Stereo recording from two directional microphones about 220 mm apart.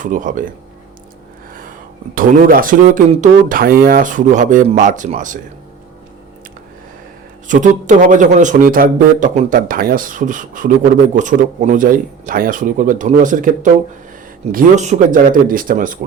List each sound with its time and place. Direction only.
0.0 s speech: 35° right (ahead or behind)
2.1 s speech: 40° right (ahead or behind)
7.4 s speech: 35° right (ahead or behind)